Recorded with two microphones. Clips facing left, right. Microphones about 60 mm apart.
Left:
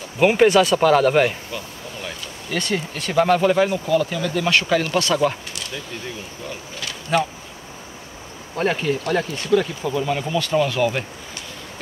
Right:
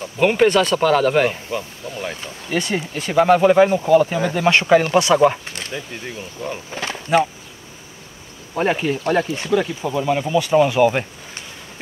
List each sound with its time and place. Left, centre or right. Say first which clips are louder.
0.2 s speech: left 1 dB; centre
1.5 s speech: right 5 dB; right
5.5 s a sound: right 2 dB; right
6.7 s speech: right 5 dB; right
8.5 s speech: right 2 dB; centre
9.0 s speech: right 3 dB; right